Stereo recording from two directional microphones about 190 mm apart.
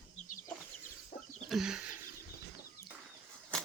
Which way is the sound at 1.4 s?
Centre (ahead or behind).